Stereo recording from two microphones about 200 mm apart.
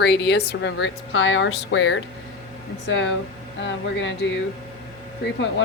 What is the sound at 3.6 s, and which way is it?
Speech, 65° left (ahead or behind).